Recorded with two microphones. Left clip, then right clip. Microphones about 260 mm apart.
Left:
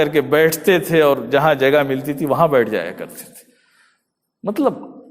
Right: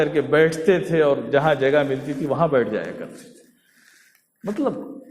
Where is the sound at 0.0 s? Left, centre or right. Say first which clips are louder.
Left 3 dB; left.